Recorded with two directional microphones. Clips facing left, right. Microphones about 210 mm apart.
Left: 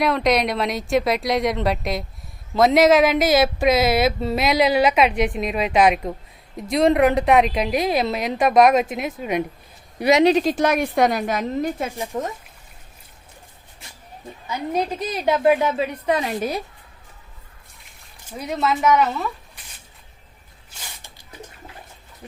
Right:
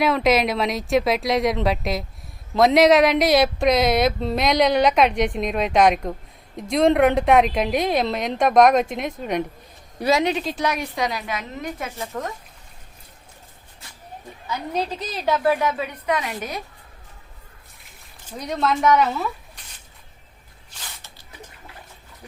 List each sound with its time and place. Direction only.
0.0 s speech: centre (ahead or behind)
10.0 s speech: 20° left (ahead or behind)
10.2 s a woman's voice: 45° left (ahead or behind)
11.9 s a woman's voice: 15° left (ahead or behind)
14.5 s a woman's voice: 10° left (ahead or behind)
15.6 s a woman's voice: 30° left (ahead or behind)
18.3 s speech: 5° left (ahead or behind)
20.7 s a sound: 10° left (ahead or behind)